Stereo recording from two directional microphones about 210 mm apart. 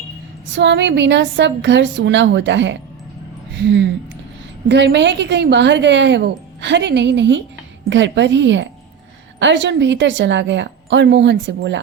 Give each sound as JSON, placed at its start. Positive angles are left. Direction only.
{"t": 0.5, "sound": "a woman's voice", "side_deg": -55}